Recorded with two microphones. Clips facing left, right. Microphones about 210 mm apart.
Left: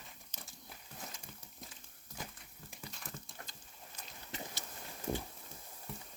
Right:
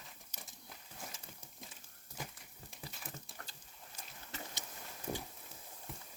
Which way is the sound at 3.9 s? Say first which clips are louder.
Even; 10° right (ahead or behind).